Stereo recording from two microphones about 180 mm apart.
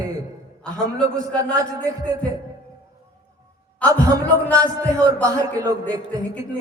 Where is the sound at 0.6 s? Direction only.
5° left (ahead or behind).